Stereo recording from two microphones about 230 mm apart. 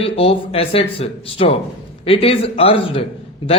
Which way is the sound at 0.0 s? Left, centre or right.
Left.